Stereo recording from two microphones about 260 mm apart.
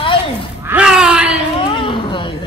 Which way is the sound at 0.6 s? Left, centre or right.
Centre.